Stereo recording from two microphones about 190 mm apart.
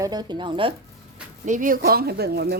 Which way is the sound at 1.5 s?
45° right (ahead or behind).